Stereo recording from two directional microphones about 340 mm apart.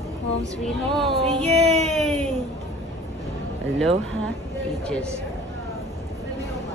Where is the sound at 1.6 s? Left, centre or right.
Centre.